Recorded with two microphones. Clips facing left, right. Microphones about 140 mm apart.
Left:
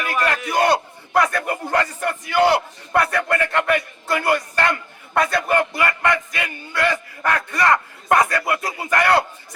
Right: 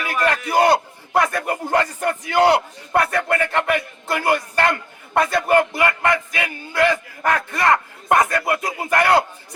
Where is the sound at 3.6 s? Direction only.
5° right (ahead or behind).